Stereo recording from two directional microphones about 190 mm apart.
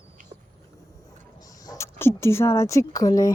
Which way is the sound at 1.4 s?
20° left (ahead or behind).